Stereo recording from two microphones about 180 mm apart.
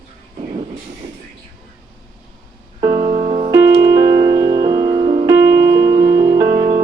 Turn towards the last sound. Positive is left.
turn(degrees=-20)  # may be behind; listen again after turning